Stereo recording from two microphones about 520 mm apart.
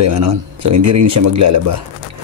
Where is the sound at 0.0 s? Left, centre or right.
Right.